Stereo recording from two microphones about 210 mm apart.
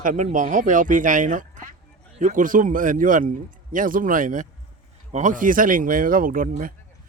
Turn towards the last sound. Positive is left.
turn(degrees=-40)  # may be behind; listen again after turning